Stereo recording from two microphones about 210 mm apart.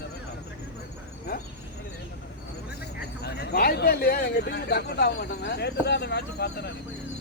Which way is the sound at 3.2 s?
50° left (ahead or behind).